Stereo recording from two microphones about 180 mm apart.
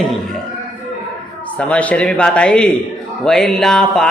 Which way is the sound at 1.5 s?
5° left (ahead or behind).